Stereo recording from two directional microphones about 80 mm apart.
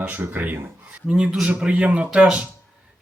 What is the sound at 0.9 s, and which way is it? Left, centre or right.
Speech, centre.